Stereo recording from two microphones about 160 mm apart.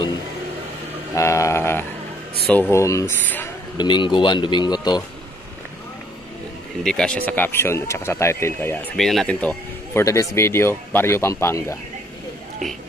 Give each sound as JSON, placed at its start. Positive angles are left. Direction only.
{"t": 1.1, "sound": "speech", "side_deg": 20}
{"t": 3.7, "sound": "speech", "side_deg": 30}
{"t": 6.8, "sound": "speech", "side_deg": 5}
{"t": 8.9, "sound": "speech", "side_deg": 0}